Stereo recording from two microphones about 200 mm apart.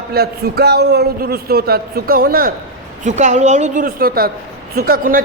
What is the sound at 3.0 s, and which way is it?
A woman's voice, 35° right (ahead or behind).